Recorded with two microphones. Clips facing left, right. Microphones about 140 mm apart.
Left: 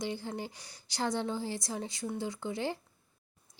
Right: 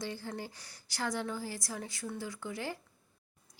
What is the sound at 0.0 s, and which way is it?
A woman's voice, 20° left (ahead or behind).